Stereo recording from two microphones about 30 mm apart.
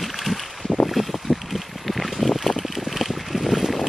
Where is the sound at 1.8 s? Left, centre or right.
Centre.